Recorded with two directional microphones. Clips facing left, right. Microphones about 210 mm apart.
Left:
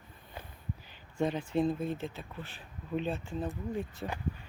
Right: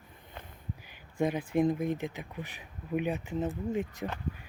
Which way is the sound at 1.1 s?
10° right (ahead or behind).